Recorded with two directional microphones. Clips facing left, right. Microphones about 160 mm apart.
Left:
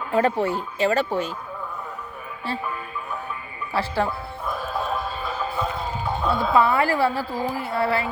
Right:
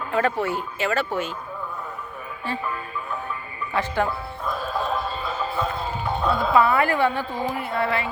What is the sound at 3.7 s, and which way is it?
Speech, 30° left (ahead or behind).